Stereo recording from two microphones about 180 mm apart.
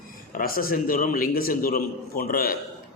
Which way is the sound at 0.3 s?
55° left (ahead or behind).